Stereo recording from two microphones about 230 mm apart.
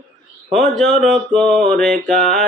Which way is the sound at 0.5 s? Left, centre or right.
Centre.